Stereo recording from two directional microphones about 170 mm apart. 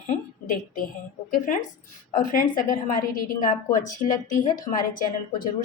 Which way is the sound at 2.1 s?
55° left (ahead or behind).